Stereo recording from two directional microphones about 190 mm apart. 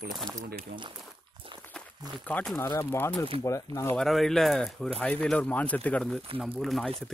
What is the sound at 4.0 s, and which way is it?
Speech, centre (ahead or behind).